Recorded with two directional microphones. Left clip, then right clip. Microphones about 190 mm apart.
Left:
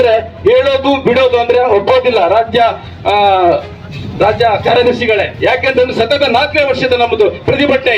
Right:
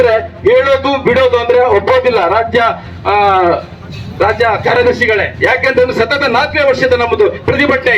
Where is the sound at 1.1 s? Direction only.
45° left (ahead or behind).